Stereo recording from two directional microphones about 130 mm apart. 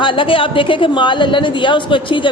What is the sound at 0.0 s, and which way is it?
A woman's voice, 40° left (ahead or behind).